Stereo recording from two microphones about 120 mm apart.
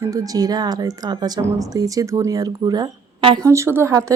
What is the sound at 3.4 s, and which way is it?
Speech, 25° right (ahead or behind).